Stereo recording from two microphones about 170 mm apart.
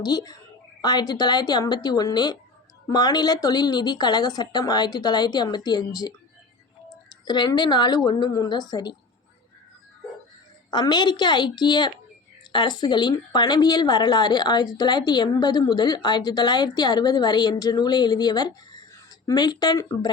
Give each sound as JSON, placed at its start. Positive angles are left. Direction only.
{"t": 0.0, "sound": "a woman's voice", "side_deg": 25}
{"t": 7.3, "sound": "a woman's voice", "side_deg": 25}
{"t": 10.7, "sound": "a woman's voice", "side_deg": 25}